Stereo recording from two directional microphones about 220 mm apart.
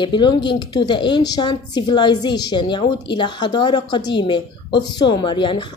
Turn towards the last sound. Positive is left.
turn(degrees=20)  # may be behind; listen again after turning